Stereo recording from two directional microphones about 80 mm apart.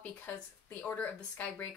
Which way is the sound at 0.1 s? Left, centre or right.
Centre.